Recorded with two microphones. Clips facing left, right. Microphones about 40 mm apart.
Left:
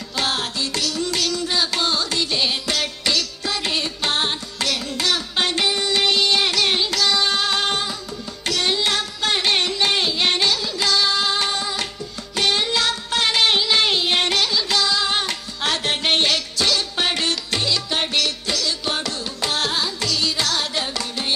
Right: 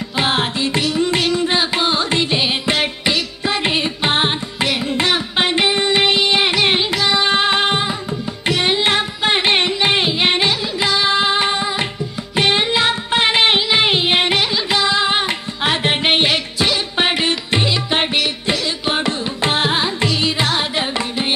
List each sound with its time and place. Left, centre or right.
0.2 s music: right
8.5 s carnatic music: right
12.4 s music: right